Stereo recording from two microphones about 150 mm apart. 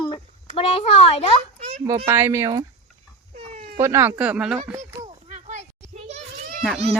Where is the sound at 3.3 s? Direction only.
45° right (ahead or behind).